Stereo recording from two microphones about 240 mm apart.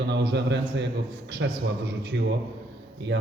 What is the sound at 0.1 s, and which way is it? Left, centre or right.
A man's voice, right.